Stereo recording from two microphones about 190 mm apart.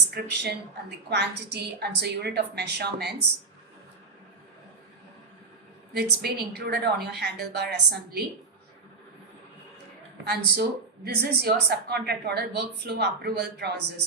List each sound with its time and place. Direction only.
0.1 s a woman's voice: 55° right (ahead or behind)
6.0 s a woman's voice: 60° right (ahead or behind)
10.2 s a woman's voice: 55° right (ahead or behind)